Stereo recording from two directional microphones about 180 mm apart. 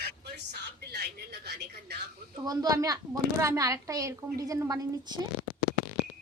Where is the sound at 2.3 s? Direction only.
20° right (ahead or behind).